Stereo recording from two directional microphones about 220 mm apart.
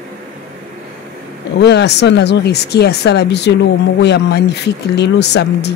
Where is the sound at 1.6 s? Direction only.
50° left (ahead or behind).